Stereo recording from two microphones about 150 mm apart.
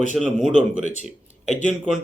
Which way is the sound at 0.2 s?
Centre (ahead or behind).